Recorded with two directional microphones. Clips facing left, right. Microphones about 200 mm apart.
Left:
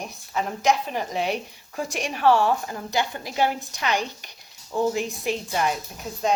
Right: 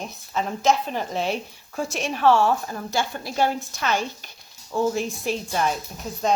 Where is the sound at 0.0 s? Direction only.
15° left (ahead or behind).